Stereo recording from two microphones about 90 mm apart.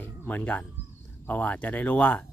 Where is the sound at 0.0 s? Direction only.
20° left (ahead or behind).